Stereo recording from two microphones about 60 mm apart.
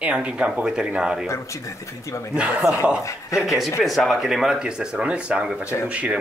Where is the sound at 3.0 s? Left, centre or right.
Left.